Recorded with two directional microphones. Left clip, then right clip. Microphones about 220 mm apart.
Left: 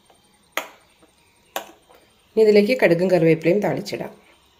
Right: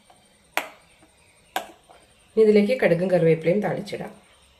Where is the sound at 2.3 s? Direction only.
35° left (ahead or behind).